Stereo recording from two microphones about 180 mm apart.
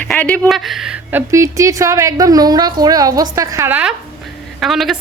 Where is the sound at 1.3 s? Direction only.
15° right (ahead or behind); by 4.9 s centre (ahead or behind).